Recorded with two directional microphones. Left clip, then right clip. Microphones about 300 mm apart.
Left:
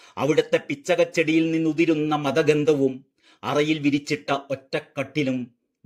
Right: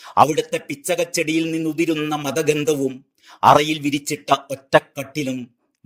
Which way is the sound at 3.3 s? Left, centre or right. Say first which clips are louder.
Right 9 dB; right.